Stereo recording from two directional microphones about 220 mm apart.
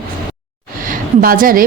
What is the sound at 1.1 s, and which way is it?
Speech, 40° right (ahead or behind).